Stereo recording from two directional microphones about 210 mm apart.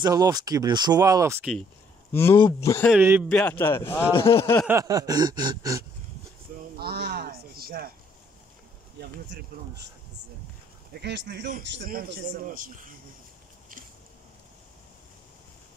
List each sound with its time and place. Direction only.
0.0 s speech: 20° right (ahead or behind)
2.1 s speech: 15° left (ahead or behind)
2.9 s speech: 10° right (ahead or behind)
3.3 s speech: 5° left (ahead or behind)
4.1 s speech: 25° left (ahead or behind)
4.6 s speech: 15° right (ahead or behind)
6.8 s a sound: 50° right (ahead or behind)
9.5 s a man's voice: 45° right (ahead or behind)
10.9 s a man's voice: 50° right (ahead or behind)